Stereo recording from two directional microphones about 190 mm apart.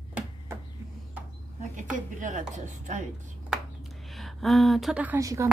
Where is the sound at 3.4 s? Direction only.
Centre (ahead or behind); by 5.5 s 15° right (ahead or behind).